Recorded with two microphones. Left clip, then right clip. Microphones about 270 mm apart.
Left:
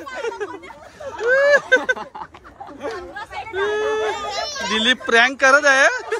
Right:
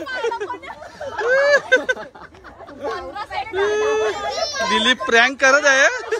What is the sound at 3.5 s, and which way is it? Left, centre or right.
Run, centre.